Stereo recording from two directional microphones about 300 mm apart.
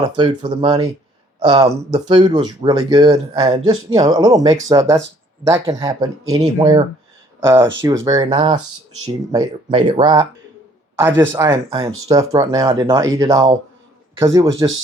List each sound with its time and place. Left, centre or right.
0.2 s speech: centre
8.9 s speech: right
9.3 s speech: centre